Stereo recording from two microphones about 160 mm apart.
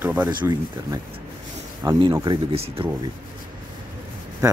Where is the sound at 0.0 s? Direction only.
10° right (ahead or behind).